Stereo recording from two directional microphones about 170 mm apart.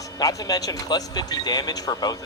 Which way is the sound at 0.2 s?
20° left (ahead or behind).